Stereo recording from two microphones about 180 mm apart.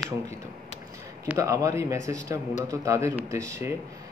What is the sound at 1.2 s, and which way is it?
Speech, 15° right (ahead or behind).